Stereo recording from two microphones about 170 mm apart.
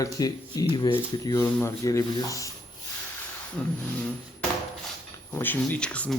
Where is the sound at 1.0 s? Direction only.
15° left (ahead or behind).